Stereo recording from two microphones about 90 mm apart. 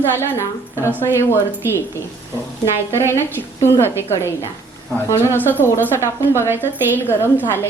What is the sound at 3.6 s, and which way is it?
Speech, 30° left (ahead or behind).